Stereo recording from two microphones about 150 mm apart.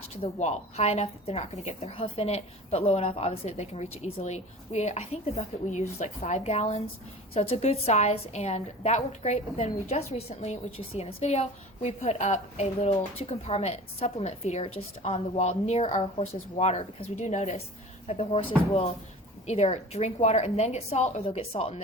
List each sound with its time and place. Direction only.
0.2 s a woman's voice: 50° left (ahead or behind)
18.1 s speech: 40° left (ahead or behind)
19.5 s a woman's voice: 45° left (ahead or behind)